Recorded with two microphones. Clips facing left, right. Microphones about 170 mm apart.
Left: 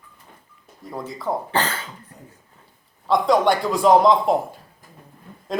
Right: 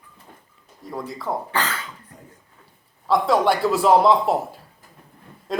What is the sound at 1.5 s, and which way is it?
Speech, 30° left (ahead or behind).